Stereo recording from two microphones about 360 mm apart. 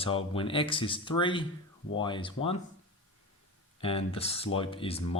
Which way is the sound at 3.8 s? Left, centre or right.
Centre.